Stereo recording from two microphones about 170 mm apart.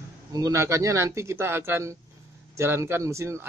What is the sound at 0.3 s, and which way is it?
Speech, 20° right (ahead or behind).